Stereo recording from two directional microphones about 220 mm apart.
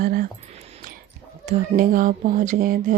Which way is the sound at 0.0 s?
40° right (ahead or behind).